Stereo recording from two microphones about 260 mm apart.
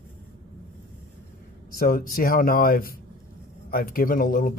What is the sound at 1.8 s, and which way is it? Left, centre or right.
Speech, left.